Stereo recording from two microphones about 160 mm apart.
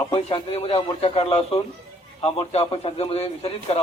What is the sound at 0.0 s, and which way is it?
A man's voice, 35° left (ahead or behind).